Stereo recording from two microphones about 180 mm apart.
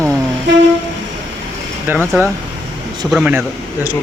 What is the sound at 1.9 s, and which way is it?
Speech, 10° right (ahead or behind).